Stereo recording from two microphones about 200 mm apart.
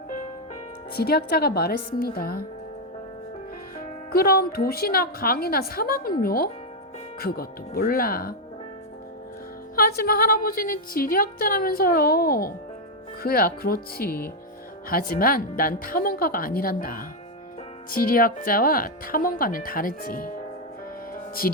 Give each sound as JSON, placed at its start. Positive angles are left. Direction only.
{"t": 0.9, "sound": "a woman's voice", "side_deg": 50}
{"t": 4.1, "sound": "a woman's voice", "side_deg": 50}
{"t": 9.7, "sound": "a woman's voice", "side_deg": 50}
{"t": 21.4, "sound": "a woman's voice", "side_deg": 45}